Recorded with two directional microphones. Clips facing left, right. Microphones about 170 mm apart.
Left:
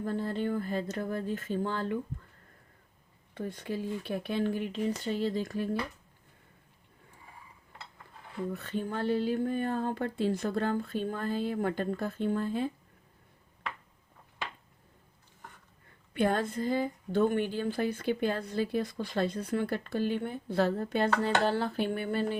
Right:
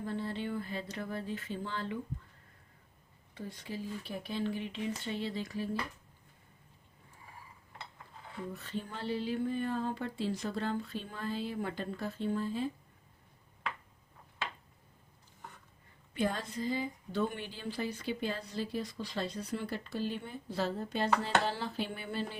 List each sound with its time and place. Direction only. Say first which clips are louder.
0.0 s speech: left 5 dB; 45° left (ahead or behind)
3.3 s speech: left 6 dB; 55° left (ahead or behind)
8.5 s speech: left 7 dB; 55° left (ahead or behind)
16.1 s a woman's voice: left 6 dB; 55° left (ahead or behind)